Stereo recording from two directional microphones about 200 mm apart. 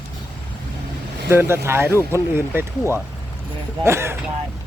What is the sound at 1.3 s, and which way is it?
Speech, 10° right (ahead or behind).